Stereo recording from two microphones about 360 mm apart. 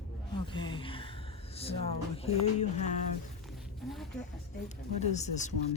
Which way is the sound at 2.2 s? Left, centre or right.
Centre.